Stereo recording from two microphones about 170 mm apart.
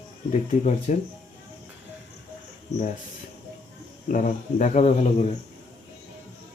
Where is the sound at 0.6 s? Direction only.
45° left (ahead or behind).